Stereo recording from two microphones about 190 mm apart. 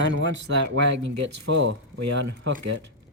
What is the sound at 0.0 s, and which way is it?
Speech, 75° right (ahead or behind).